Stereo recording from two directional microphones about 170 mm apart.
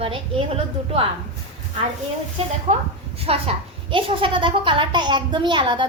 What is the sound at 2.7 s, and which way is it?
A child's voice, 40° right (ahead or behind).